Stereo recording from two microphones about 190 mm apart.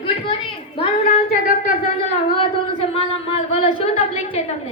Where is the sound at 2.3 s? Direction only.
30° left (ahead or behind).